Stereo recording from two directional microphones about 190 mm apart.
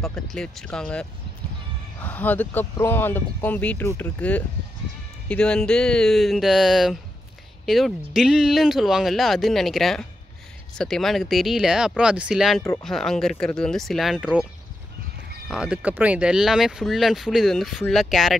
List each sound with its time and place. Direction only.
0.0 s speech: 5° left (ahead or behind)
15.4 s speech: 5° right (ahead or behind)